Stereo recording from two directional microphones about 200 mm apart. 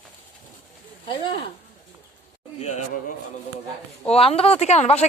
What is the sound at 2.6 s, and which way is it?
Speech, 35° left (ahead or behind).